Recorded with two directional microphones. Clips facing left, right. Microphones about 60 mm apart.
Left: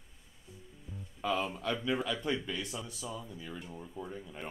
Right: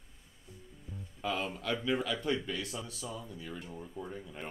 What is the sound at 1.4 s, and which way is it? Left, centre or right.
Speech, centre.